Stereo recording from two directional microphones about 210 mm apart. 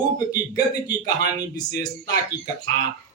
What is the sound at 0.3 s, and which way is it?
A man's voice, 15° left (ahead or behind).